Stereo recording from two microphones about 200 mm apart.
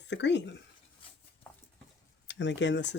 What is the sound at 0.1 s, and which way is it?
Speech, 60° left (ahead or behind).